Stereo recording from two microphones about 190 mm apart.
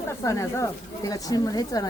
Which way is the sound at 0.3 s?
15° left (ahead or behind).